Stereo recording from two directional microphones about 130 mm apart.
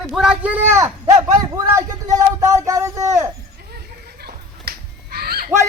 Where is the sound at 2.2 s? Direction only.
25° right (ahead or behind).